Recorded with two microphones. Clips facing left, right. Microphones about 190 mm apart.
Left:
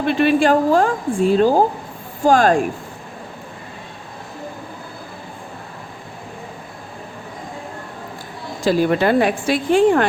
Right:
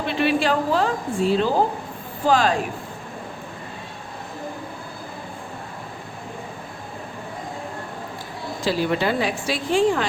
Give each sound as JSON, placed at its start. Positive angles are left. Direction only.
{"t": 0.0, "sound": "a woman's voice", "side_deg": 50}
{"t": 8.6, "sound": "a woman's voice", "side_deg": 50}